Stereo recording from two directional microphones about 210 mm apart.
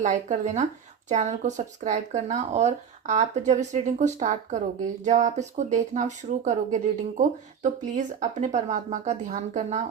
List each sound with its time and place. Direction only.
0.0 s speech: 35° right (ahead or behind)